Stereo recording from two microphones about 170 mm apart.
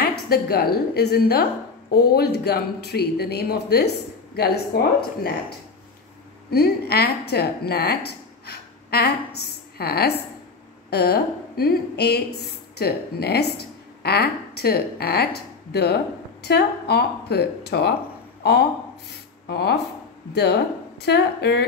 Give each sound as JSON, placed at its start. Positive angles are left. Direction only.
{"t": 0.0, "sound": "speech", "side_deg": 65}
{"t": 6.5, "sound": "a woman's voice", "side_deg": 70}